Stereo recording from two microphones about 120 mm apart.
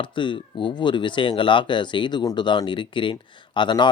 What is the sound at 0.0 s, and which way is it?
Speech, 40° left (ahead or behind).